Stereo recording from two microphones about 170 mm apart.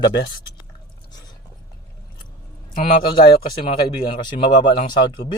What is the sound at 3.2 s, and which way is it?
Speech, 30° left (ahead or behind).